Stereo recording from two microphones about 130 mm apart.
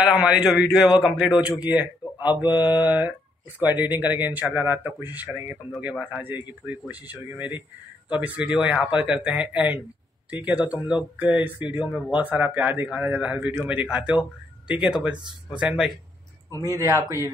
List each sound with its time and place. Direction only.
0.0 s a man's voice: 5° right (ahead or behind)
16.7 s a man's voice: 25° right (ahead or behind)